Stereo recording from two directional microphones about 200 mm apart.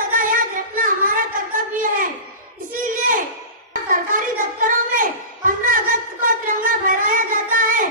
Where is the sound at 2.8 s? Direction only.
40° right (ahead or behind).